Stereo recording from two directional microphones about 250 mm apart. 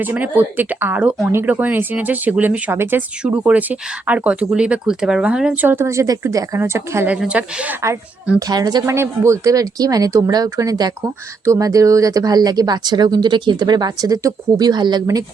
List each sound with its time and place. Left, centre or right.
0.0 s speech: centre